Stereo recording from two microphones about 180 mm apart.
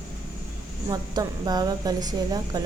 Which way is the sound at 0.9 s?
20° right (ahead or behind).